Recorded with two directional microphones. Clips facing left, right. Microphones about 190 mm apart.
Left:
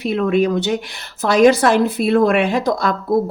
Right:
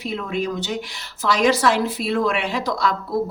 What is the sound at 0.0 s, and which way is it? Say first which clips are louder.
Speech: left 9 dB; 65° left (ahead or behind).